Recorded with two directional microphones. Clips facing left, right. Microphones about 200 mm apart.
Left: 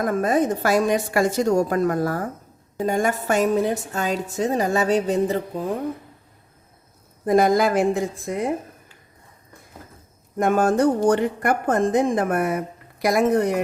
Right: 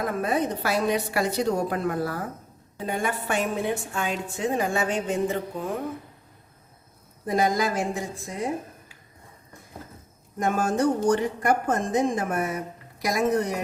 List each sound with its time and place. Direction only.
0.0 s a woman's voice: 45° left (ahead or behind)
7.3 s a woman's voice: 55° left (ahead or behind)
10.3 s a woman's voice: 60° left (ahead or behind)